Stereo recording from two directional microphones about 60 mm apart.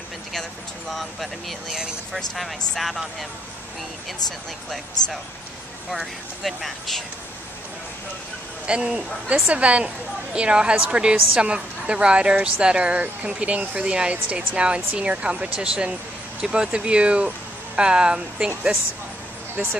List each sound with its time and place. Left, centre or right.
0.3 s speech: centre
5.0 s speech: left
5.9 s speech: centre
8.6 s speech: centre
19.5 s speech: right